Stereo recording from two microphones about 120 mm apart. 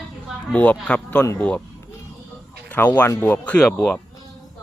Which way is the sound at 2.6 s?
15° left (ahead or behind).